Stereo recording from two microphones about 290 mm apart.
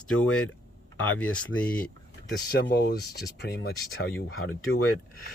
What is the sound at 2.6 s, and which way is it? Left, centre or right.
Speech, left.